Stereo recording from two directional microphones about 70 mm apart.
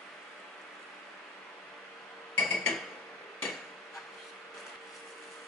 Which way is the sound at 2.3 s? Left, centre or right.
Centre.